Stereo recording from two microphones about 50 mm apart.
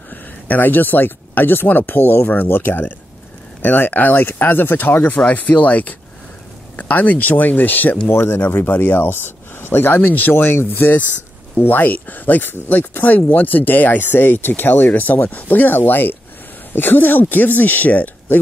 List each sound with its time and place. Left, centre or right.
0.1 s speech: left
8.1 s speech: left